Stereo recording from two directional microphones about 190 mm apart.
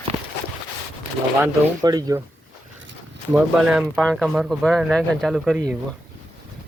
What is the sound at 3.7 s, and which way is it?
Speech, centre (ahead or behind).